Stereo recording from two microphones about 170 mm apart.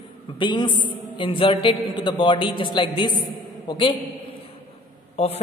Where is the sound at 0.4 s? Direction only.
25° left (ahead or behind).